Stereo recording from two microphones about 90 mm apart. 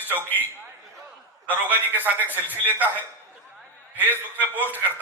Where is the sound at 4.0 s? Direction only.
20° left (ahead or behind).